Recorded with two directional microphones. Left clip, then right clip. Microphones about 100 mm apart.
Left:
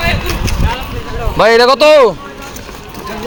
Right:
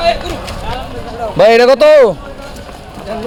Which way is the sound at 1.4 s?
90° right.